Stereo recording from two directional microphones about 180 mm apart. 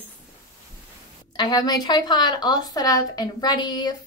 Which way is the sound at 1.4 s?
20° left (ahead or behind).